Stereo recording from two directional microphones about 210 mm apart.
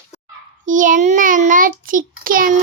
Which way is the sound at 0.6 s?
40° right (ahead or behind).